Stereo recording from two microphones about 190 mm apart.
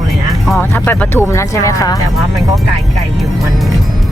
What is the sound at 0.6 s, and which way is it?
Speech, 10° left (ahead or behind).